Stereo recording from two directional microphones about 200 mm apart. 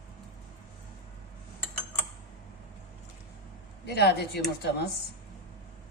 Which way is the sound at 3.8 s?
55° left (ahead or behind).